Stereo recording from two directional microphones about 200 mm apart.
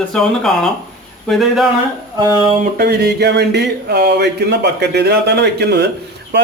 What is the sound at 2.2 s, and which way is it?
Speech, 20° right (ahead or behind).